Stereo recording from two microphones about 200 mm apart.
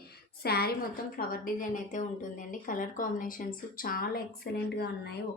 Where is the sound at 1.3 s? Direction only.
40° left (ahead or behind).